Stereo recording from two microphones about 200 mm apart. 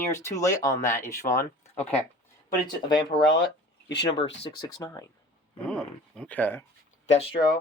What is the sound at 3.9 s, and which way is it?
Speech, 60° left (ahead or behind).